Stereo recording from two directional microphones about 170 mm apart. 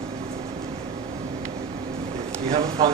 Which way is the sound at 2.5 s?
35° right (ahead or behind).